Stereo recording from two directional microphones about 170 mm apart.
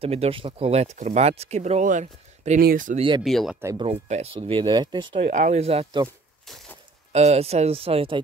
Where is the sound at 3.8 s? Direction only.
40° right (ahead or behind).